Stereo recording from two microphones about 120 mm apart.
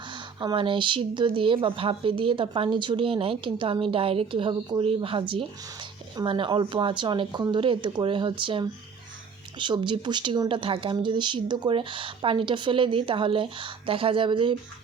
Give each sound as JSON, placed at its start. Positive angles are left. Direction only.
{"t": 0.1, "sound": "speech", "side_deg": -40}